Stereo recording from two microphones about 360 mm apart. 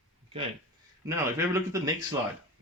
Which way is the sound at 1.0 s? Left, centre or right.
Centre.